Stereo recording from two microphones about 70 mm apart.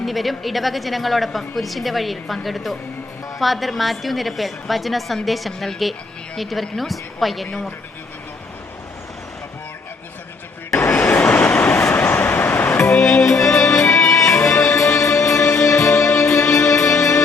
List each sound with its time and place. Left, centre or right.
0.0 s a woman's voice: centre
10.8 s vehicle: left
11.9 s music: left
12.8 s music: centre
13.8 s music: left